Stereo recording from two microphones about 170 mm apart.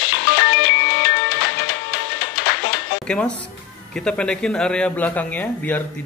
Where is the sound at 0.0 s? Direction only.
90° left.